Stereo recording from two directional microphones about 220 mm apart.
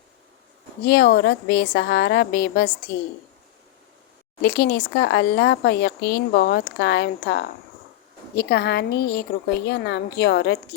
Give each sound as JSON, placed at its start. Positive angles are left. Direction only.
{"t": 0.9, "sound": "speech", "side_deg": 50}
{"t": 4.4, "sound": "speech", "side_deg": 45}